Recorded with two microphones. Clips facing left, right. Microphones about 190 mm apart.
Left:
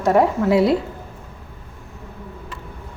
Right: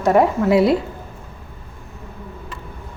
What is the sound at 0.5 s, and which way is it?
Speech, 65° right (ahead or behind).